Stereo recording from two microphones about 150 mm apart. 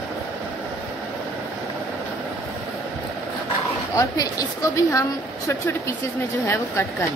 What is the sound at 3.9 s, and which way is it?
A woman's voice, 25° left (ahead or behind).